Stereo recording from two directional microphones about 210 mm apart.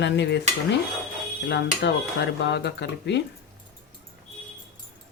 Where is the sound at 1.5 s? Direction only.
55° left (ahead or behind).